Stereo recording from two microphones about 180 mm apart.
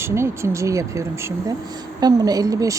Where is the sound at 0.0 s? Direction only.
15° right (ahead or behind).